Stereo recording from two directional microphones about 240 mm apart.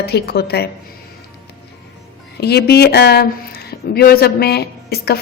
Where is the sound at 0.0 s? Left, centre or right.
Left.